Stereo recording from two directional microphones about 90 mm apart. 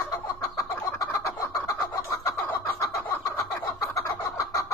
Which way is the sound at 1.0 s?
40° left (ahead or behind).